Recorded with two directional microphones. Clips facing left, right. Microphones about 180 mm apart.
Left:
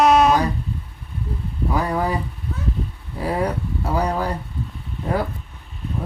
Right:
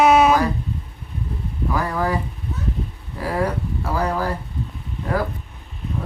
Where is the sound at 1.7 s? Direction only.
20° left (ahead or behind).